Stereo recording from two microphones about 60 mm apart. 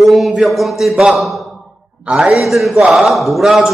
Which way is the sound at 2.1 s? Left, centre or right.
Right.